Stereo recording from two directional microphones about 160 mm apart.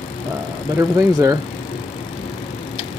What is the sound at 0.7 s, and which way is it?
Speech, 20° right (ahead or behind).